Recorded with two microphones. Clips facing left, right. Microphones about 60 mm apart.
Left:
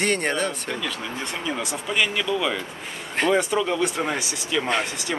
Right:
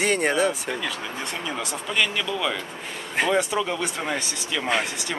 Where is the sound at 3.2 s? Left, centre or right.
Centre.